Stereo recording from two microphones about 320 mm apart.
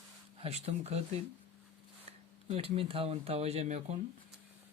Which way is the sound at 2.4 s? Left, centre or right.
Centre.